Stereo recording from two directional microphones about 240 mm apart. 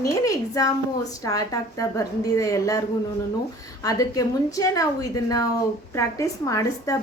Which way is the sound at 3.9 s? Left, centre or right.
Centre.